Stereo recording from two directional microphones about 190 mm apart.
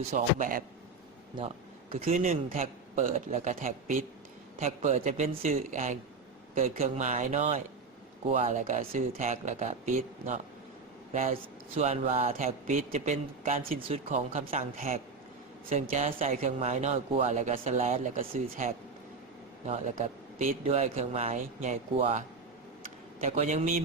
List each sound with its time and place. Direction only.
0.1 s a man's voice: 45° right (ahead or behind)
2.1 s a man's voice: 45° right (ahead or behind)
13.8 s a man's voice: 30° right (ahead or behind)